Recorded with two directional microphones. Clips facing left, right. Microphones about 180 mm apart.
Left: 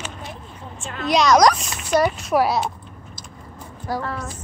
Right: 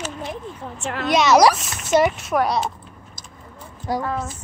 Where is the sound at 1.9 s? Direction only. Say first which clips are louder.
Right 2 dB; 20° right (ahead or behind).